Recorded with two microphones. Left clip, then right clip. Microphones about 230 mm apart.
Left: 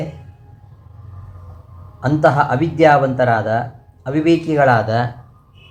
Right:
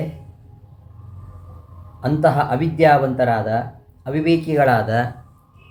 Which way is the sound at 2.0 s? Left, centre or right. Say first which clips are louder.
Left 3 dB; right.